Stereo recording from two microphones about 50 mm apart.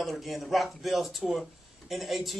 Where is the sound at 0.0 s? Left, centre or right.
Centre.